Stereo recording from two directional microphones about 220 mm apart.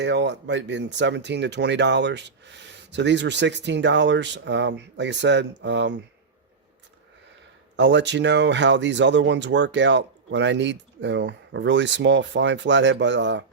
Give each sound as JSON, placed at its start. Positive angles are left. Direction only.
{"t": 0.0, "sound": "speech", "side_deg": -50}
{"t": 7.8, "sound": "speech", "side_deg": -55}